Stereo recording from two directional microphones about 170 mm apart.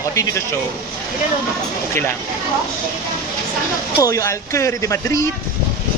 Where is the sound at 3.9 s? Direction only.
20° left (ahead or behind).